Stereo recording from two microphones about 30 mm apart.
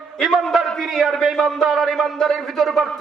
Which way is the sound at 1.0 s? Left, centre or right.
Centre.